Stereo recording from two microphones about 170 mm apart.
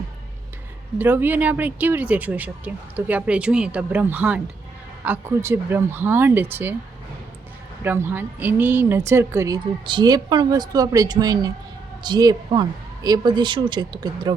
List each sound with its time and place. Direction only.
0.9 s speech: 10° right (ahead or behind)
7.9 s a woman's voice: 15° right (ahead or behind)